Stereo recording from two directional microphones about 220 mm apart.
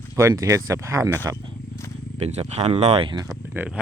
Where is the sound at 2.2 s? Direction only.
30° right (ahead or behind).